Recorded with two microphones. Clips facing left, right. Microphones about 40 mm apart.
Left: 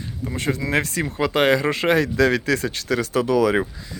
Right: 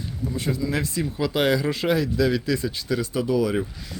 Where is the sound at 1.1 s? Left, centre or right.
Left.